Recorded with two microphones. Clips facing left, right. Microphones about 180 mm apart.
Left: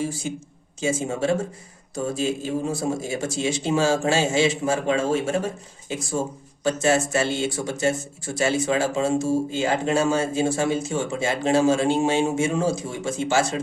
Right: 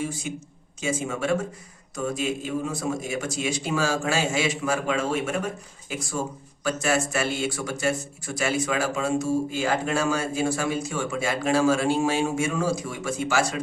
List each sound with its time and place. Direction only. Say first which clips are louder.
0.0 s a man's voice: left 3 dB; 30° left (ahead or behind)